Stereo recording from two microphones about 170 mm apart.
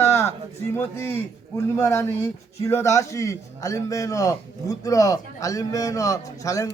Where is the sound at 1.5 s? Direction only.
15° left (ahead or behind).